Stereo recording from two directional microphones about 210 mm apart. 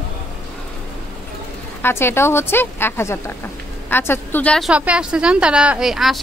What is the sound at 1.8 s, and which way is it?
A woman's voice, 10° left (ahead or behind).